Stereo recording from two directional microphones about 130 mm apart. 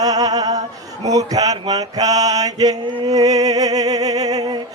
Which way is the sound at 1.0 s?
30° right (ahead or behind).